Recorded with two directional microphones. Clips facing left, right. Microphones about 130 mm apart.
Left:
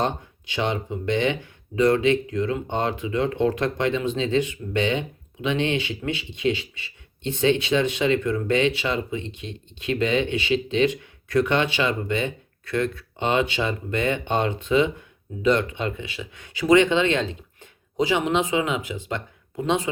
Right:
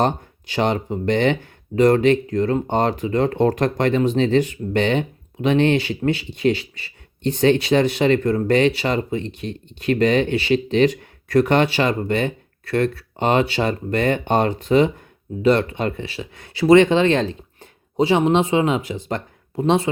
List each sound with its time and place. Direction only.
0.0 s speech: 45° right (ahead or behind)